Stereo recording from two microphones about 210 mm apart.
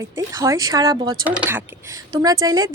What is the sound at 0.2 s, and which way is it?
Speech, 15° right (ahead or behind).